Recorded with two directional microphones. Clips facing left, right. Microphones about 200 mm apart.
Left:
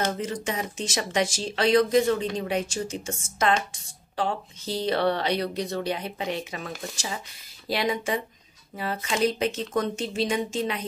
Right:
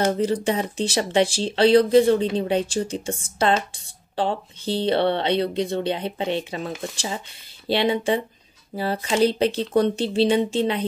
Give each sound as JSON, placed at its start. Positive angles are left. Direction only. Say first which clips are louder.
{"t": 0.0, "sound": "speech", "louder": "right 7 dB", "side_deg": -35}